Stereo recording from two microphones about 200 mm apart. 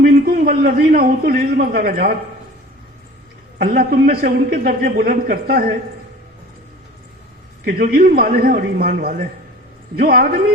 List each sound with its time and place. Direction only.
0.0 s a man's voice: 45° right (ahead or behind)
3.6 s a man's voice: 45° right (ahead or behind)
7.6 s a man's voice: 45° right (ahead or behind)